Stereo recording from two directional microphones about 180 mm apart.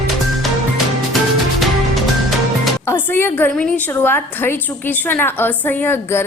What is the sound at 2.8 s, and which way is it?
A woman's voice, 15° left (ahead or behind).